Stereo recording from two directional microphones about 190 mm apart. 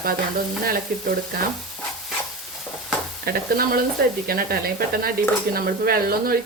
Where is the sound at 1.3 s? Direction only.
50° right (ahead or behind).